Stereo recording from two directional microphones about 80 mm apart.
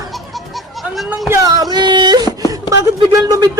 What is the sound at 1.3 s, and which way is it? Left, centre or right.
Speech, right.